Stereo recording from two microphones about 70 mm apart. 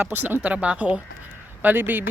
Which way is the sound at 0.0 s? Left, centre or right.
Right.